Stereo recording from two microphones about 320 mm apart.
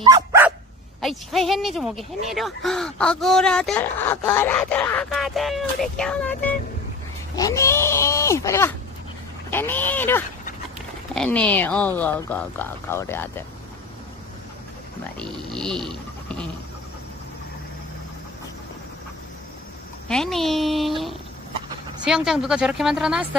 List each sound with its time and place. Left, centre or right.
0.0 s dog: centre
1.0 s speech: centre
15.1 s speech: centre
20.1 s speech: centre